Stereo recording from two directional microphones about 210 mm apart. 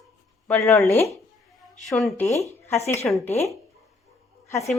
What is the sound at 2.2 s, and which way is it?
Speech, 15° left (ahead or behind).